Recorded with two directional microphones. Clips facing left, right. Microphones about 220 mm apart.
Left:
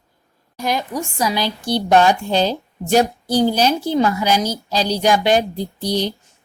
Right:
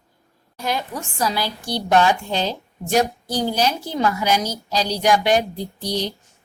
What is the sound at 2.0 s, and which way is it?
A woman's voice, 35° left (ahead or behind).